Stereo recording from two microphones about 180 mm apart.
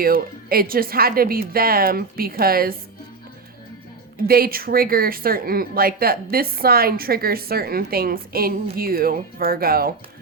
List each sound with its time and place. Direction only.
0.0 s a woman's voice: 55° right (ahead or behind)
4.2 s a woman's voice: 55° right (ahead or behind)